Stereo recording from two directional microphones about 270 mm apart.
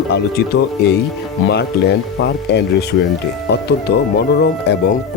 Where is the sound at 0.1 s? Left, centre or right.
Left.